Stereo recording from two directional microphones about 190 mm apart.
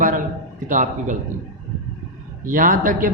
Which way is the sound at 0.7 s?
40° right (ahead or behind).